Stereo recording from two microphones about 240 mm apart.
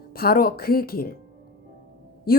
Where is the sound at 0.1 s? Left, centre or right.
Left.